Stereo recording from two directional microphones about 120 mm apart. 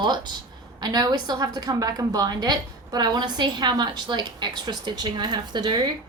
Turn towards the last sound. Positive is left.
turn(degrees=-40)  # may be behind; listen again after turning